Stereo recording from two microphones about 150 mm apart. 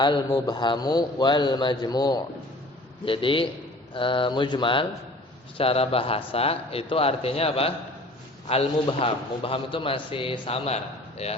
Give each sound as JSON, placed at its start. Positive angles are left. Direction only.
{"t": 0.0, "sound": "a man's voice", "side_deg": 30}